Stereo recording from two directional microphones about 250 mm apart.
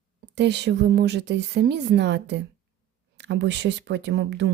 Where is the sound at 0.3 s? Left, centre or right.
Right.